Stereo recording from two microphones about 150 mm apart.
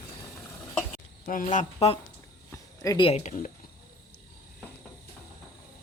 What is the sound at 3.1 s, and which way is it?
Speech, 55° left (ahead or behind).